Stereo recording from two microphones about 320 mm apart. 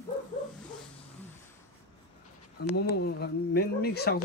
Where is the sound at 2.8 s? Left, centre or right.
Left.